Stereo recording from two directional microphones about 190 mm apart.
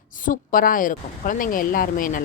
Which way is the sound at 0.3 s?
45° left (ahead or behind).